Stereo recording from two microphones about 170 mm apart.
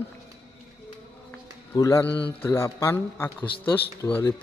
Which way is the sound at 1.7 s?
20° left (ahead or behind).